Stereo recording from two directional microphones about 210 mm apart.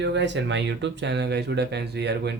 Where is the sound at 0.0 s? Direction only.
55° right (ahead or behind).